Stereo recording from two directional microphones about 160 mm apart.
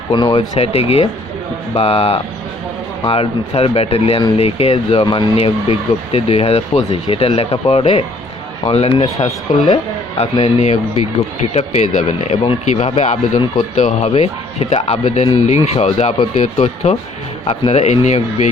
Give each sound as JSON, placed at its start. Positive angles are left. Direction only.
{"t": 0.1, "sound": "speech", "side_deg": 30}
{"t": 0.5, "sound": "speech", "side_deg": 40}
{"t": 5.4, "sound": "speech", "side_deg": 40}
{"t": 10.2, "sound": "speech", "side_deg": 40}